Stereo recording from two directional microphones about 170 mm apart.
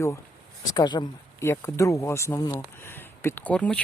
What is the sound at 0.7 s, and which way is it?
Speech, 25° left (ahead or behind).